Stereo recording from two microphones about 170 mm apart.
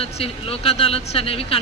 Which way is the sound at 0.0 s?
35° left (ahead or behind).